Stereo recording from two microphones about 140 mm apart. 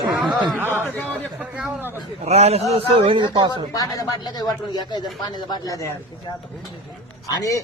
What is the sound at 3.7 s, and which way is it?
Speech, 25° left (ahead or behind).